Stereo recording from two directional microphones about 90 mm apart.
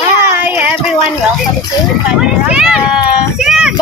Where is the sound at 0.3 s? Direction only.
20° right (ahead or behind).